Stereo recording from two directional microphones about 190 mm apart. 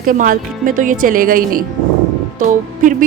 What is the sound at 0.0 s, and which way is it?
Music, 45° right (ahead or behind).